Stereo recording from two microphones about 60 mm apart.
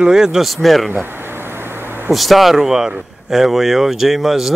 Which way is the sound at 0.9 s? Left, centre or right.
Right.